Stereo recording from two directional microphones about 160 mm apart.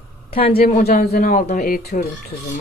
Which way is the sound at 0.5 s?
70° left (ahead or behind).